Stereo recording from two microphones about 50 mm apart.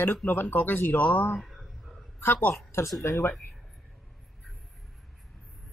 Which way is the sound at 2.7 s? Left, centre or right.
Left.